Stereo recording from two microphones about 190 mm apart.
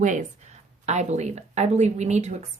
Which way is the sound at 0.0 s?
40° right (ahead or behind).